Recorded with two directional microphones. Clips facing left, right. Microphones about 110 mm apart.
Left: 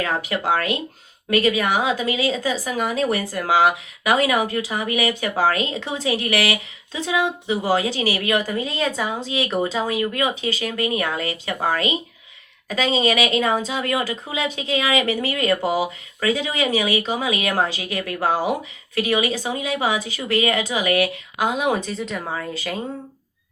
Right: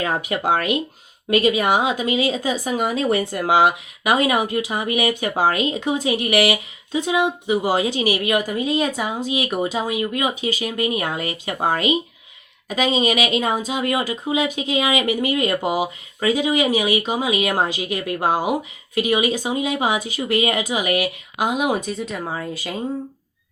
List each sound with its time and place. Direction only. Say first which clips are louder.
0.0 s a woman's voice: right 1 dB; 20° right (ahead or behind)